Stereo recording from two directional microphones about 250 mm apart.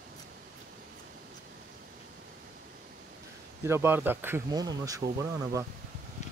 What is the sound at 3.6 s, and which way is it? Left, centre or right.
Speech, centre.